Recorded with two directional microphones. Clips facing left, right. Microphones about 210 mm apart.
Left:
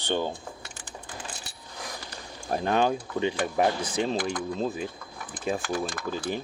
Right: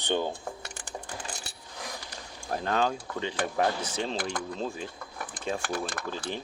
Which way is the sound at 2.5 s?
15° left (ahead or behind).